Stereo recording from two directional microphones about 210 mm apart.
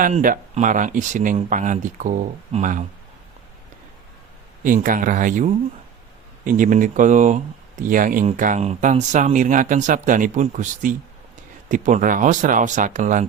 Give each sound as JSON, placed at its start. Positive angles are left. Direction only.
{"t": 0.0, "sound": "speech", "side_deg": -40}
{"t": 4.6, "sound": "speech", "side_deg": -40}